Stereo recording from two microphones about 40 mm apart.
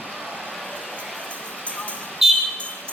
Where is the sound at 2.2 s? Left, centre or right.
Centre.